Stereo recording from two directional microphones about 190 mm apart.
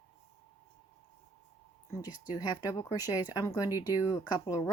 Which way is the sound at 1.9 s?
15° left (ahead or behind).